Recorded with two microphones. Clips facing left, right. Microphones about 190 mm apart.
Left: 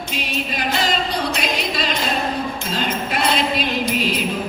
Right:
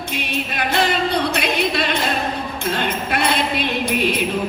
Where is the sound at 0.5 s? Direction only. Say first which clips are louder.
Right 2 dB; 60° right (ahead or behind).